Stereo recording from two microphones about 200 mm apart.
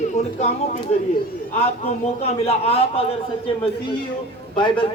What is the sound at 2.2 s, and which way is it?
Speech, 30° left (ahead or behind).